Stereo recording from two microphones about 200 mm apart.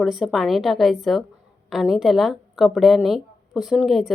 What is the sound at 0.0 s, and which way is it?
A woman's voice, centre (ahead or behind).